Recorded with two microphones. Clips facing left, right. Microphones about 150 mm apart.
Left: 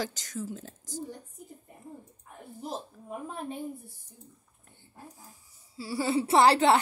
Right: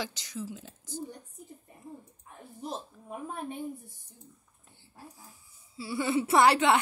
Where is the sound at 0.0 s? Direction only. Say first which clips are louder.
Left 2 dB; 45° left (ahead or behind).